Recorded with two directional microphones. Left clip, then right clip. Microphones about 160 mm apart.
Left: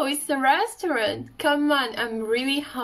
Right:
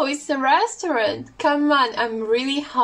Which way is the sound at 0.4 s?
20° left (ahead or behind).